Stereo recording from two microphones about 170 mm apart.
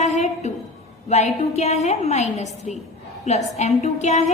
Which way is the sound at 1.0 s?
40° left (ahead or behind).